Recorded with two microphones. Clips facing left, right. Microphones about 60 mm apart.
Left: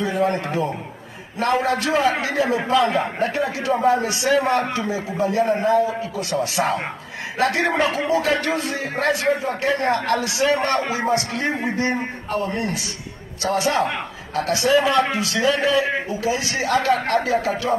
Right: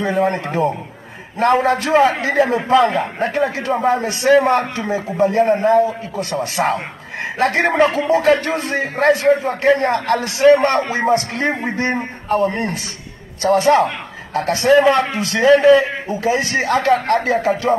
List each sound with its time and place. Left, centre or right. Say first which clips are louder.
0.0 s a man's voice: right 3 dB; right